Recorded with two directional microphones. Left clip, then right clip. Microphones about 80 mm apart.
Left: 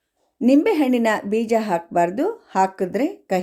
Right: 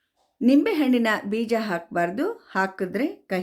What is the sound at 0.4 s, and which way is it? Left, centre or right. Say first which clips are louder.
Speech: left 3 dB; left.